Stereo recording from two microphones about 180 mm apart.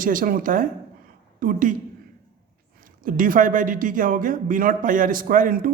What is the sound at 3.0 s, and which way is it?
Speech, 50° right (ahead or behind).